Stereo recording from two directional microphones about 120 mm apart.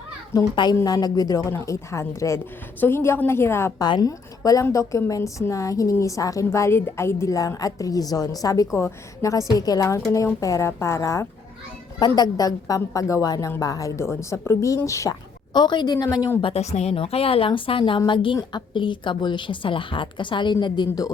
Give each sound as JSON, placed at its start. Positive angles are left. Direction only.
{"t": 0.3, "sound": "a woman's voice", "side_deg": 35}
{"t": 3.8, "sound": "a woman's voice", "side_deg": 35}
{"t": 11.9, "sound": "a woman's voice", "side_deg": 35}
{"t": 15.5, "sound": "a woman's voice", "side_deg": 40}
{"t": 16.4, "sound": "a woman's voice", "side_deg": 55}